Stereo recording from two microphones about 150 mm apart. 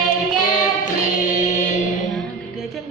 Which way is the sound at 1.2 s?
55° left (ahead or behind).